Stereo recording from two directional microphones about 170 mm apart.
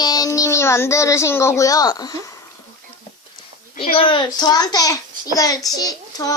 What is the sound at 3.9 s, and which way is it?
A child's voice, 30° left (ahead or behind).